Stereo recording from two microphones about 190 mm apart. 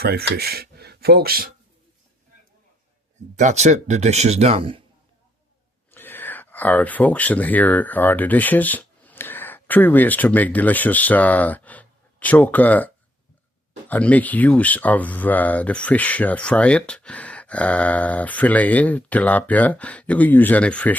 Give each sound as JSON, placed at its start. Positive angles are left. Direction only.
{"t": 0.0, "sound": "speech", "side_deg": -55}
{"t": 3.3, "sound": "speech", "side_deg": -40}
{"t": 5.9, "sound": "speech", "side_deg": 10}